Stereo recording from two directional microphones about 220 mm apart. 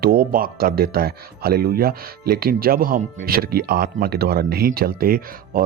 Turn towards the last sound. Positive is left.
turn(degrees=-40)  # may be behind; listen again after turning